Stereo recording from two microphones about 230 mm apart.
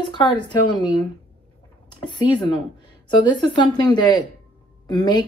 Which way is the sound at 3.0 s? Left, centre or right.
Centre.